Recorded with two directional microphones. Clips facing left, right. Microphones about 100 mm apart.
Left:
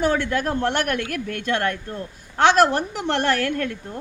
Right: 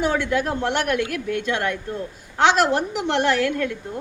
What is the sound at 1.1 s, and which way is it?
A woman's voice, 45° left (ahead or behind).